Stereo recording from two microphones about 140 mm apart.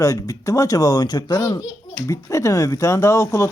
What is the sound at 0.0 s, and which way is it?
Speech, 25° left (ahead or behind).